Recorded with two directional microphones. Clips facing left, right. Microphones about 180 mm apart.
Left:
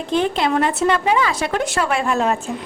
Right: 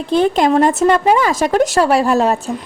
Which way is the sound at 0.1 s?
40° right (ahead or behind).